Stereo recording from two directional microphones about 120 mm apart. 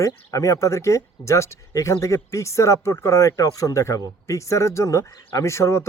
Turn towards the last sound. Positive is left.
turn(degrees=25)  # may be behind; listen again after turning